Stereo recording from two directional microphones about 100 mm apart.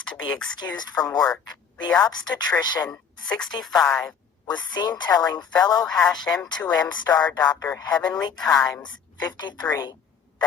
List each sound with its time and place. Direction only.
0.5 s a woman's voice: 45° left (ahead or behind)
2.9 s speech: 10° left (ahead or behind)
4.0 s a woman's voice: 45° left (ahead or behind)